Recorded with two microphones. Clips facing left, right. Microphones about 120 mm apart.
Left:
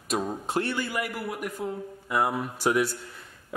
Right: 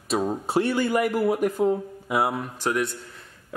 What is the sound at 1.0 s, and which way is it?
Speech, 35° right (ahead or behind).